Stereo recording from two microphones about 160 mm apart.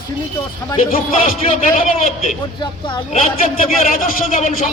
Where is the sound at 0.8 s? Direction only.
60° left (ahead or behind).